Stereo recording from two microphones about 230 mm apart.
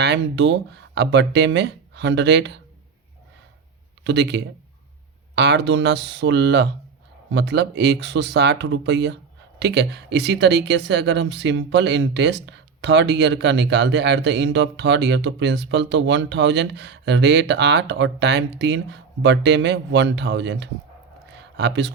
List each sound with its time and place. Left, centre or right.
0.0 s speech: right
4.0 s speech: right